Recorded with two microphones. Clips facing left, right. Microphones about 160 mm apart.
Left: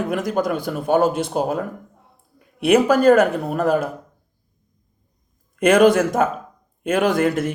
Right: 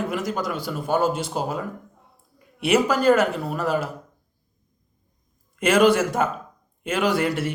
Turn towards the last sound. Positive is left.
turn(degrees=50)  # may be behind; listen again after turning